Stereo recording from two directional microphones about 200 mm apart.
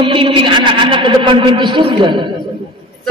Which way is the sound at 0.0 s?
25° right (ahead or behind).